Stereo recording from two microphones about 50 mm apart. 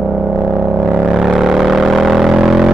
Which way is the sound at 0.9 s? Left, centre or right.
Centre.